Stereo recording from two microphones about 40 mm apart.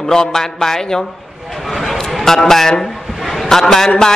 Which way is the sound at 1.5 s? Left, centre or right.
Centre.